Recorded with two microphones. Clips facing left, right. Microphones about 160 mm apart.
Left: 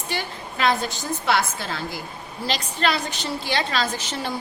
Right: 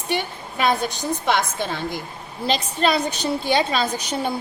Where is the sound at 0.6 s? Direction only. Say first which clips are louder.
Right 2 dB; 15° right (ahead or behind).